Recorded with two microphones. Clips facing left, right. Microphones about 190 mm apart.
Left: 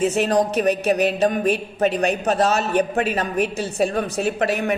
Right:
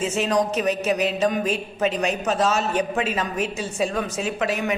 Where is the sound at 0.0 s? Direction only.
60° left (ahead or behind).